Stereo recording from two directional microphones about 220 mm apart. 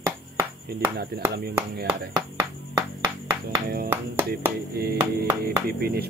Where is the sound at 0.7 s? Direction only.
45° right (ahead or behind).